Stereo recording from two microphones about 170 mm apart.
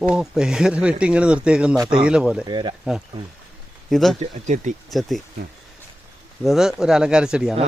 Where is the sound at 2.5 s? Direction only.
25° right (ahead or behind).